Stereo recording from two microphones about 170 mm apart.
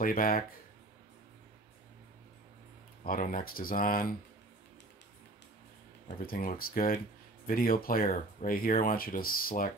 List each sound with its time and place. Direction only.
0.0 s speech: 55° left (ahead or behind)
3.1 s speech: 55° left (ahead or behind)
6.0 s speech: 55° left (ahead or behind)